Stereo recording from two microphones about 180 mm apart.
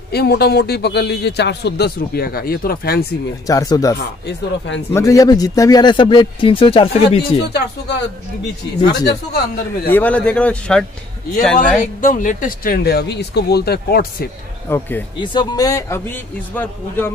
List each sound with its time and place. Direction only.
0.1 s a man's voice: 60° left (ahead or behind)
3.4 s speech: 20° left (ahead or behind)
4.3 s speech: 90° left
4.9 s speech: 20° left (ahead or behind)
8.8 s speech: 65° left (ahead or behind)
9.8 s a man's voice: 10° left (ahead or behind)
11.8 s a man's voice: 50° left (ahead or behind)
14.7 s a man's voice: 10° left (ahead or behind)
15.1 s a man's voice: 25° left (ahead or behind)